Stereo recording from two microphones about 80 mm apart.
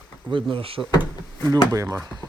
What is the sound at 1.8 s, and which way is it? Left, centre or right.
Speech, right.